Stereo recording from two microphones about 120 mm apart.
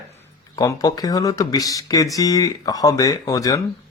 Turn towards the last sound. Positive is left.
turn(degrees=30)  # may be behind; listen again after turning